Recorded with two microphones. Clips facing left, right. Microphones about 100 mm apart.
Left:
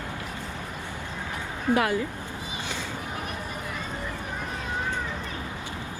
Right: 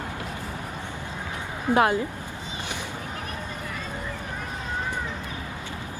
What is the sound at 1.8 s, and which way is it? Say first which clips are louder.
Speech: right 5 dB; 25° right (ahead or behind).